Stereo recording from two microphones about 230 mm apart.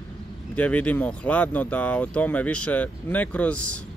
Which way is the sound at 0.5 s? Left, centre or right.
Centre.